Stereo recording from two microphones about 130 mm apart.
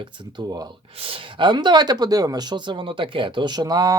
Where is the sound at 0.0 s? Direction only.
35° right (ahead or behind).